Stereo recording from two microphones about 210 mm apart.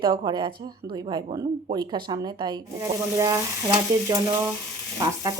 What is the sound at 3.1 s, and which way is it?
Frying, 15° right (ahead or behind).